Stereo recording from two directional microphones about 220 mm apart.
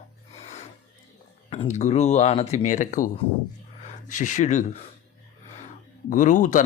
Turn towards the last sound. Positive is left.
turn(degrees=35)  # may be behind; listen again after turning